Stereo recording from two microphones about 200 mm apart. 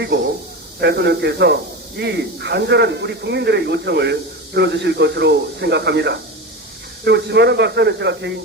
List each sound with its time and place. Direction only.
0.8 s speech: 55° right (ahead or behind)